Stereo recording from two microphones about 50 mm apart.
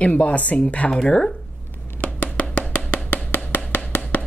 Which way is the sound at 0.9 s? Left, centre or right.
Centre.